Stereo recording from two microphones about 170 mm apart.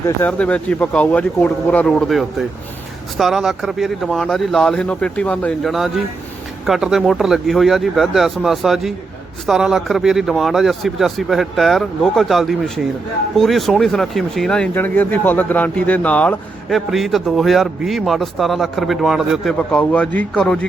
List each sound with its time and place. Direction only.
0.2 s speech: 10° left (ahead or behind)